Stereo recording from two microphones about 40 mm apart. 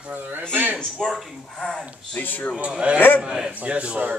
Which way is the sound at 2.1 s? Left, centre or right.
Left.